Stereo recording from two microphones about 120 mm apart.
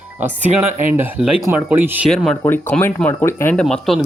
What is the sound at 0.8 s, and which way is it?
Speech, 15° right (ahead or behind).